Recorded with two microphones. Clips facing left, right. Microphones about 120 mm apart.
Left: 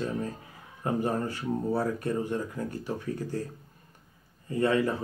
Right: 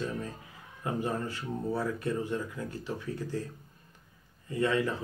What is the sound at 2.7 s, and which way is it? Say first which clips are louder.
Speech: left 3 dB; 15° left (ahead or behind).